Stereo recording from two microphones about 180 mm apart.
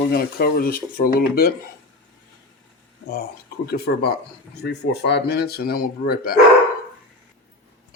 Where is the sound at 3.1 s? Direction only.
60° left (ahead or behind).